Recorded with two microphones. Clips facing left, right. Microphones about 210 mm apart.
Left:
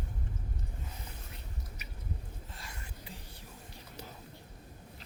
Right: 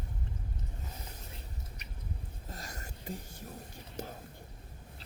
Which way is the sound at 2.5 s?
40° right (ahead or behind).